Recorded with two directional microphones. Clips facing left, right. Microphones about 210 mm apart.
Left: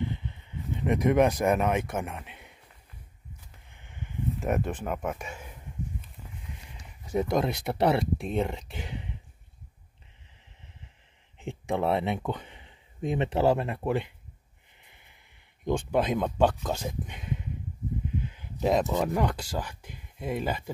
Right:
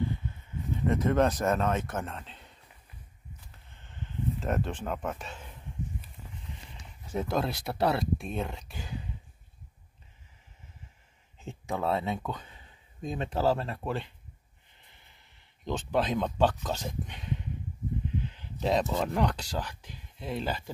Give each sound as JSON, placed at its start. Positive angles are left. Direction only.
{"t": 0.2, "sound": "speech", "side_deg": 20}
{"t": 3.7, "sound": "a sound", "side_deg": 15}
{"t": 7.1, "sound": "speech", "side_deg": 15}
{"t": 11.7, "sound": "speech", "side_deg": 25}
{"t": 15.6, "sound": "speech", "side_deg": 10}
{"t": 18.6, "sound": "speech", "side_deg": 5}